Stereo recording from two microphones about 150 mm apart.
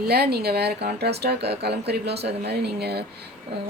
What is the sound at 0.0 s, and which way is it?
Speech, 90° right.